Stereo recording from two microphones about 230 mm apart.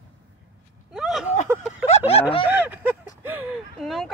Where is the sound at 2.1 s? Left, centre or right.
Left.